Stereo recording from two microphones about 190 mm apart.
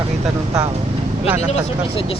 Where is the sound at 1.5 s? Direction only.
30° left (ahead or behind).